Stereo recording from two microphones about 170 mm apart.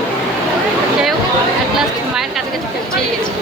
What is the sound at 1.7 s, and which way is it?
Chatter, centre (ahead or behind).